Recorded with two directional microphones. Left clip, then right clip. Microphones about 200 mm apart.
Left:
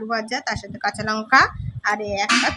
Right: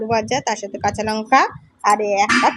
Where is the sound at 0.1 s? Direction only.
5° right (ahead or behind).